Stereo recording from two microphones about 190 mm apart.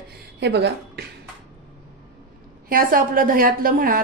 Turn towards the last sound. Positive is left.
turn(degrees=-50)  # may be behind; listen again after turning